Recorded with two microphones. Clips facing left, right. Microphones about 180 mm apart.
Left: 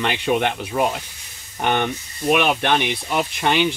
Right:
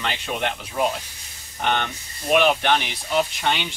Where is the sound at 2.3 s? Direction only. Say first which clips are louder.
Even; 60° left (ahead or behind).